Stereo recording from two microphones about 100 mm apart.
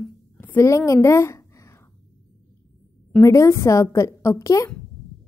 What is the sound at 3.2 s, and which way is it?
A woman's voice, 30° left (ahead or behind).